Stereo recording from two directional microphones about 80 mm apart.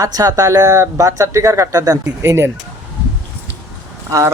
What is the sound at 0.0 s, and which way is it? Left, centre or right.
Speech, right.